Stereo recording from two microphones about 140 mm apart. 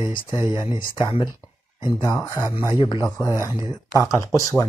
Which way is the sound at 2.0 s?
25° left (ahead or behind).